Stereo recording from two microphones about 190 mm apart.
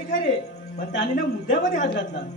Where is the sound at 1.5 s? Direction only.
70° left (ahead or behind).